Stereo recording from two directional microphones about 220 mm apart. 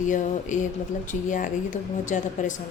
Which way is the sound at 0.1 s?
35° left (ahead or behind).